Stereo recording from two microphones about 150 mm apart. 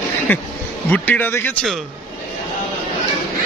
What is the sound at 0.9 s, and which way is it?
Speech, 10° left (ahead or behind).